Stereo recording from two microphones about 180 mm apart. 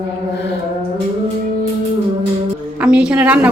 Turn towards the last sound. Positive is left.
turn(degrees=-5)  # may be behind; listen again after turning